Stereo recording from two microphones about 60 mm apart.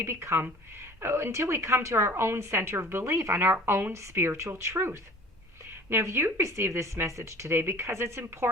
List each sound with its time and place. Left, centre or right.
0.0 s speech: right
3.9 s a woman's voice: right
4.2 s speech: right